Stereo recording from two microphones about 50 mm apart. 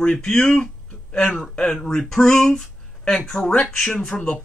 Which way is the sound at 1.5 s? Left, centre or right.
Centre.